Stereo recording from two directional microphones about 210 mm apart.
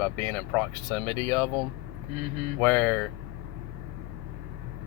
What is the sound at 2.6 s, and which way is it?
Speech, 5° left (ahead or behind).